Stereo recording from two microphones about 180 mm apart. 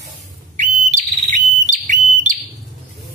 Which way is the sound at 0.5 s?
45° right (ahead or behind).